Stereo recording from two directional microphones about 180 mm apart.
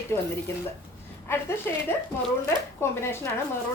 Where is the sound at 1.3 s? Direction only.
15° left (ahead or behind).